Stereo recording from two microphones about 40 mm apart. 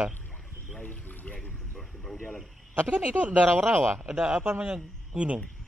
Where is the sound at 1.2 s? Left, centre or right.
Left.